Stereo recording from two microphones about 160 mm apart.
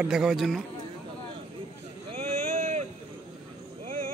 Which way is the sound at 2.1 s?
40° right (ahead or behind).